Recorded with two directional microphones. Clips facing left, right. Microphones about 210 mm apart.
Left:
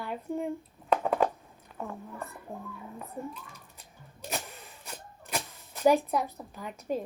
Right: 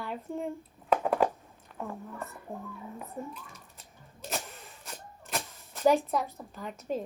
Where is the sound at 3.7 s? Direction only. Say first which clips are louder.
Left 1 dB; centre (ahead or behind).